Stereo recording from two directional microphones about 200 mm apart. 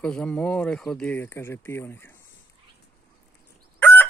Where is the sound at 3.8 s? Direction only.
10° left (ahead or behind).